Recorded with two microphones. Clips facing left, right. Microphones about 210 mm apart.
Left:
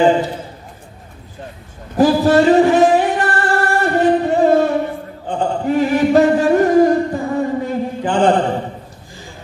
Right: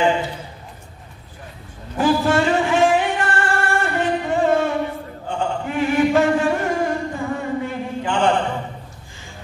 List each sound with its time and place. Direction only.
0.0 s a man's voice: 35° left (ahead or behind)
2.0 s singing: 40° left (ahead or behind)
5.3 s chant: 35° left (ahead or behind)